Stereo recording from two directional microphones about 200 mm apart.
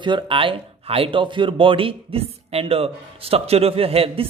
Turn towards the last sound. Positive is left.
turn(degrees=-30)  # may be behind; listen again after turning